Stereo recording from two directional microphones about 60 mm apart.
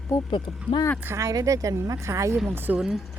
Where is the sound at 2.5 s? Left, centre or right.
Right.